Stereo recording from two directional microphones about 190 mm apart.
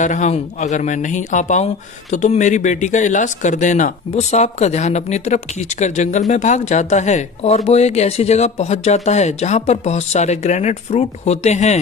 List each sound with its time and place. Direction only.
0.0 s speech: 40° left (ahead or behind)